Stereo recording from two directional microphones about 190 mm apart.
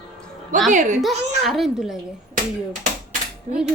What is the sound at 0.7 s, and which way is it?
Speech, 40° right (ahead or behind).